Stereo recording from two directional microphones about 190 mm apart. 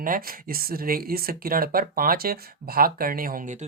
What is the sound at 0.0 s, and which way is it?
Speech, 50° right (ahead or behind).